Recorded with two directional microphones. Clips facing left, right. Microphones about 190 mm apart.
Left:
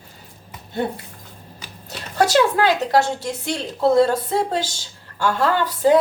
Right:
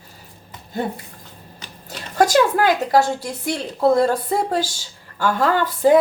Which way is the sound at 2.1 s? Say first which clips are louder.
Right 1 dB; 45° right (ahead or behind).